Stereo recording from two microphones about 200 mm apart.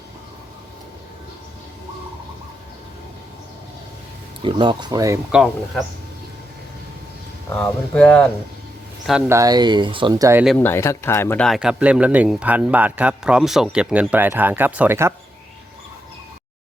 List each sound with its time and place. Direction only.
4.4 s speech: 25° right (ahead or behind)
5.3 s speech: centre (ahead or behind)
7.5 s speech: 5° left (ahead or behind)
9.3 s speech: 20° right (ahead or behind)
10.6 s speech: 10° left (ahead or behind); by 15.1 s 10° right (ahead or behind)